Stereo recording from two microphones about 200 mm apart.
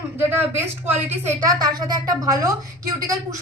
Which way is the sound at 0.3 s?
10° right (ahead or behind).